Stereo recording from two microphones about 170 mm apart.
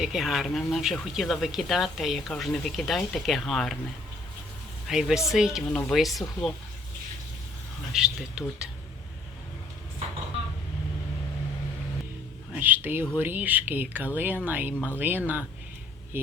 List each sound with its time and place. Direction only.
0.0 s speech: centre (ahead or behind)
4.9 s speech: 5° right (ahead or behind)
7.9 s speech: 5° right (ahead or behind)
12.5 s speech: 10° right (ahead or behind)